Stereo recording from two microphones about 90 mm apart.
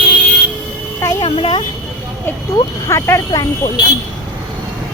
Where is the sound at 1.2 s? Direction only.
80° left.